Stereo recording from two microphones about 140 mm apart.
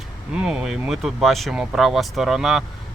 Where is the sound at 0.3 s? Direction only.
5° right (ahead or behind).